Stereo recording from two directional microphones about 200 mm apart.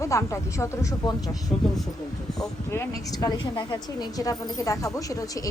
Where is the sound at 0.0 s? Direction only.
15° left (ahead or behind).